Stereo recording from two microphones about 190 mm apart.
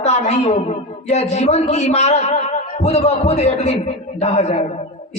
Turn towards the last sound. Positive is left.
turn(degrees=35)  # may be behind; listen again after turning